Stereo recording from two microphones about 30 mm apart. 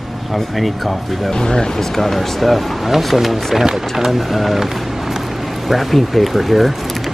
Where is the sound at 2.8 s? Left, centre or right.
Centre.